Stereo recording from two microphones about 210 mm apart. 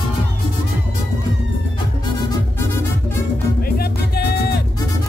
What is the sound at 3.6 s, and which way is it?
Music, 50° left (ahead or behind).